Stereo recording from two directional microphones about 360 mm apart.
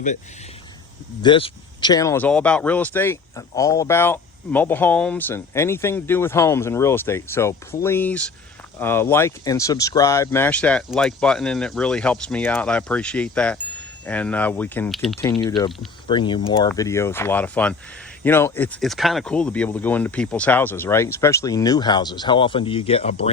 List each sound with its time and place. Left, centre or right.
1.2 s speech: centre
15.3 s speech: centre